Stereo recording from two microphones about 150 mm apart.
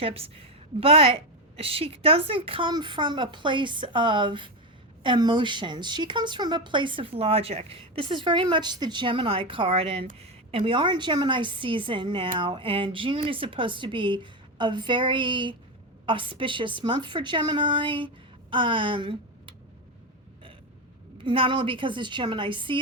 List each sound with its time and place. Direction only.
0.0 s speech: 40° right (ahead or behind)
21.2 s speech: 35° right (ahead or behind)